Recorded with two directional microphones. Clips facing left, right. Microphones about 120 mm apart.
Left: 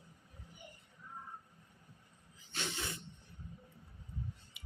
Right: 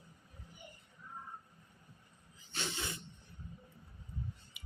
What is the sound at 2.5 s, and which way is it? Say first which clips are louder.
Hiss: even; 30° right (ahead or behind).